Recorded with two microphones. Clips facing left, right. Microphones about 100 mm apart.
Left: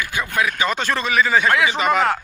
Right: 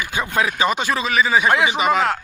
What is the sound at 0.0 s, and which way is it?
Speech, 20° right (ahead or behind).